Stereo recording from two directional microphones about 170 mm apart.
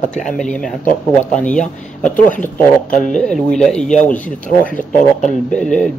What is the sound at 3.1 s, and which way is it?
Speech, 5° left (ahead or behind).